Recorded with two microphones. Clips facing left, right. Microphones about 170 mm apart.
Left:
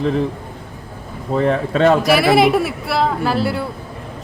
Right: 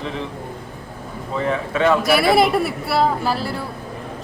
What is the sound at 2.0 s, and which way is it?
A woman's voice, centre (ahead or behind).